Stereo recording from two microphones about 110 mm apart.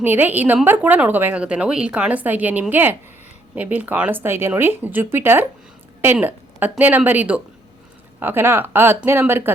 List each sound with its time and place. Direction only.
0.0 s a woman's voice: 15° right (ahead or behind)